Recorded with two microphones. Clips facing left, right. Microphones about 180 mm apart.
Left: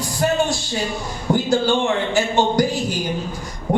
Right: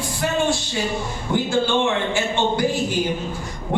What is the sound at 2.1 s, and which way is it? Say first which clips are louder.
Speech: left 4 dB; 40° left (ahead or behind).